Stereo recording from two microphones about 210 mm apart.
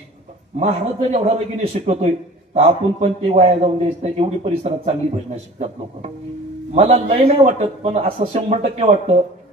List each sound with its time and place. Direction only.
0.6 s a man's voice: 30° right (ahead or behind)